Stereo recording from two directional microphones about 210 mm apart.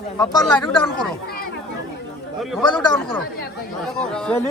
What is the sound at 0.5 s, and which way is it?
Speech, 20° left (ahead or behind).